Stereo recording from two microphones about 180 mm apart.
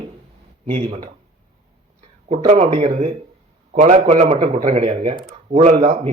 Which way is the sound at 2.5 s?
35° right (ahead or behind).